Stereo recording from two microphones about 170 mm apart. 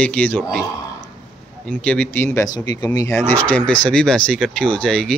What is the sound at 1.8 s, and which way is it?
Speech, 5° left (ahead or behind).